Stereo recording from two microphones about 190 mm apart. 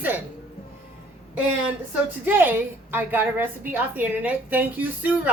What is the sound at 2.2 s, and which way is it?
A woman's voice, 10° right (ahead or behind).